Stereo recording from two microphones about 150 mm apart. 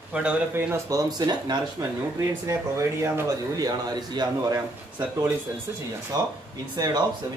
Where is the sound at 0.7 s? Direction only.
25° right (ahead or behind).